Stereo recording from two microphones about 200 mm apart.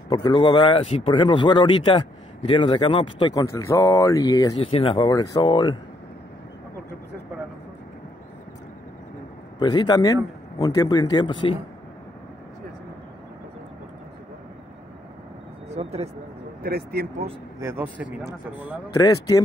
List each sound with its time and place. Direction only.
0.1 s speech: 20° left (ahead or behind)
9.6 s speech: 20° left (ahead or behind)
15.7 s a sound: 30° right (ahead or behind)
16.6 s speech: 50° right (ahead or behind)
17.6 s speech: 10° right (ahead or behind)
18.9 s speech: 20° left (ahead or behind)